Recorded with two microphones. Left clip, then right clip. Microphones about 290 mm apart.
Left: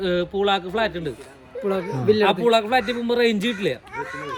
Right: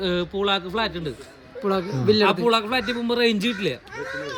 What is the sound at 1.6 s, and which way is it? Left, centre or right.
Speech, centre.